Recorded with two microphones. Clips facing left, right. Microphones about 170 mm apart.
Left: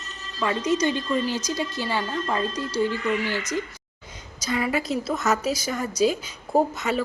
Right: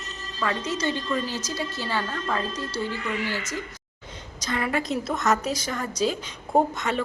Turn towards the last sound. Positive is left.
turn(degrees=5)  # may be behind; listen again after turning